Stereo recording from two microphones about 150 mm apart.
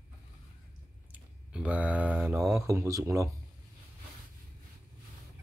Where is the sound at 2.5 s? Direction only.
20° right (ahead or behind).